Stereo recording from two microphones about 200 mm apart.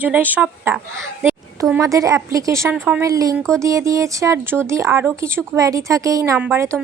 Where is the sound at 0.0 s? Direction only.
10° right (ahead or behind).